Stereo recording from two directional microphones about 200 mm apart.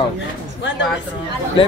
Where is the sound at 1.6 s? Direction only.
25° left (ahead or behind).